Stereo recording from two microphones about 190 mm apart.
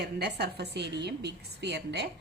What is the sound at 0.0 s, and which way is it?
A woman's voice, 60° right (ahead or behind).